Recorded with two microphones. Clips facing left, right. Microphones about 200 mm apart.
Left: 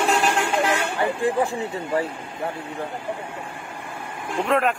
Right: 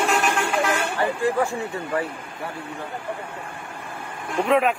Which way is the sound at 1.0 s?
30° left (ahead or behind).